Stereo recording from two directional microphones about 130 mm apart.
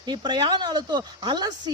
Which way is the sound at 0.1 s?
35° right (ahead or behind).